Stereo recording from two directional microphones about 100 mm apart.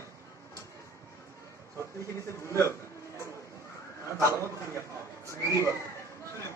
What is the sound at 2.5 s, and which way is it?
Speech, 30° left (ahead or behind).